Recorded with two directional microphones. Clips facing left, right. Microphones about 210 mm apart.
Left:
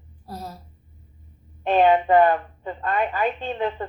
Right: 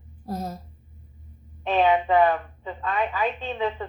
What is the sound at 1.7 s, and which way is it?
A woman's voice, 50° left (ahead or behind).